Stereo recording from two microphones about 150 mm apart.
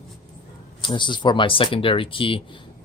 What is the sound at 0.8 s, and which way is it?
Speech, 30° left (ahead or behind).